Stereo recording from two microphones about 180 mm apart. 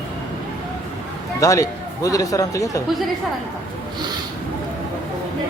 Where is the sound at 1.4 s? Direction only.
20° left (ahead or behind).